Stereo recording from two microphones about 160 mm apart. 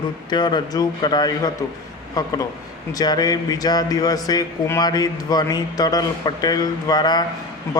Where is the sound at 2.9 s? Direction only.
25° left (ahead or behind).